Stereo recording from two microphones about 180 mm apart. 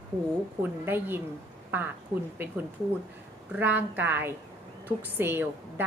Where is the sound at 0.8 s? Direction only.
10° right (ahead or behind).